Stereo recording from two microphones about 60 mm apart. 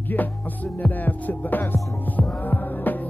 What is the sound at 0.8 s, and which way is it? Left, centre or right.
Music, left.